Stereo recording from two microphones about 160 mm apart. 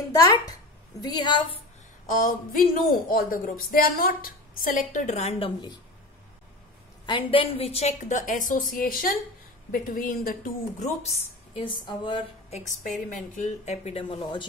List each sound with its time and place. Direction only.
0.2 s a woman's voice: 20° left (ahead or behind)
2.0 s speech: 55° left (ahead or behind)
7.1 s speech: 30° left (ahead or behind)
12.5 s speech: 55° left (ahead or behind); by 14.4 s 35° left (ahead or behind)